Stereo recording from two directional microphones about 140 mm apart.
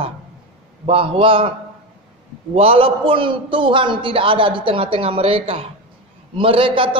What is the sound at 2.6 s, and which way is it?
A man's voice, 45° right (ahead or behind).